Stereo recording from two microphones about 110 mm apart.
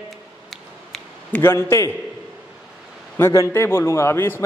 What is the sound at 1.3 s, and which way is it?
Speech, 25° left (ahead or behind).